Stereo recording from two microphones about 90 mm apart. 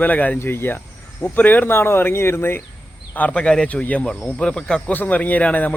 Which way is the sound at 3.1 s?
15° left (ahead or behind).